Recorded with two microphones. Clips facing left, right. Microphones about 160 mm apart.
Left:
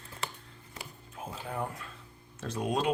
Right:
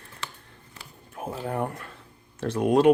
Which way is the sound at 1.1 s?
60° right (ahead or behind).